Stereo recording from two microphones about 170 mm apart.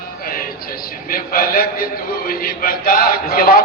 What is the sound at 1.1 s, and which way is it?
A man's voice, 60° left (ahead or behind).